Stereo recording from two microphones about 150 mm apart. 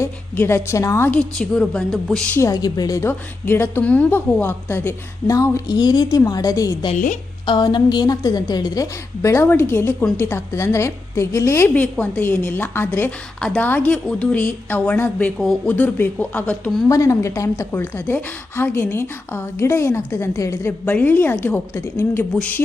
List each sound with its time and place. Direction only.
0.0 s a woman's voice: 15° left (ahead or behind)
1.4 s speech: 5° left (ahead or behind)
2.4 s a woman's voice: 25° left (ahead or behind)
6.9 s a woman's voice: 60° left (ahead or behind)
7.4 s a woman's voice: 30° left (ahead or behind); by 16.8 s 10° left (ahead or behind)
16.9 s a woman's voice: 20° left (ahead or behind)